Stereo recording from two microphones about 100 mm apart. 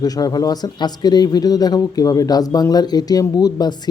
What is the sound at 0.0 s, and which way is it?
Speech, 40° left (ahead or behind).